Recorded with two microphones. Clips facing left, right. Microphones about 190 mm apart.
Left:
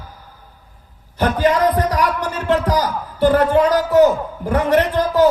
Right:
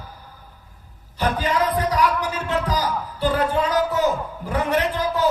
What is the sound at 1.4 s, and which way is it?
A man's voice, 65° left (ahead or behind).